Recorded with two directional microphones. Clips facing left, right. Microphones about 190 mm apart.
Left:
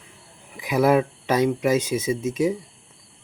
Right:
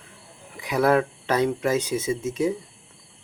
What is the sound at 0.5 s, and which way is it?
Speech, 20° left (ahead or behind).